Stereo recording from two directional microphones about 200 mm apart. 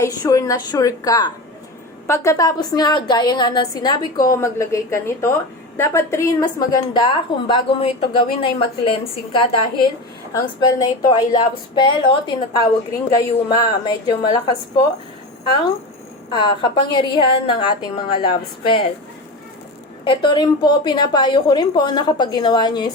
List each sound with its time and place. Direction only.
0.0 s a woman's voice: 15° left (ahead or behind)
16.3 s a woman's voice: 25° left (ahead or behind)
20.1 s a woman's voice: 20° left (ahead or behind)